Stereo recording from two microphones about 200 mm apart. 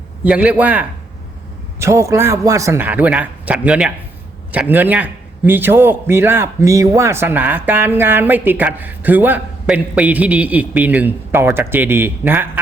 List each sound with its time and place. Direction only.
0.3 s a man's voice: 5° right (ahead or behind)